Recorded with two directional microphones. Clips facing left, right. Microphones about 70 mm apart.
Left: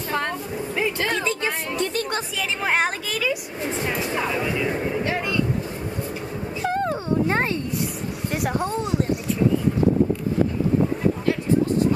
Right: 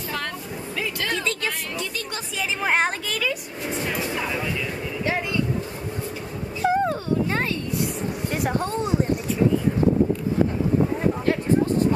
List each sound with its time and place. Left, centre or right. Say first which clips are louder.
1.0 s music: left 2 dB; centre
2.3 s speech: right 2 dB; centre
4.5 s speech: left 4 dB; centre
6.6 s dog: right 3 dB; centre
8.3 s speech: left 1 dB; centre